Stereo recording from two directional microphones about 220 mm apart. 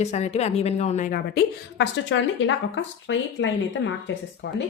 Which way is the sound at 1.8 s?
55° left (ahead or behind).